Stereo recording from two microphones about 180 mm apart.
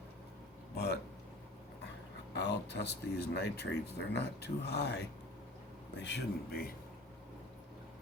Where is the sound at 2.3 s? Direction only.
70° left (ahead or behind).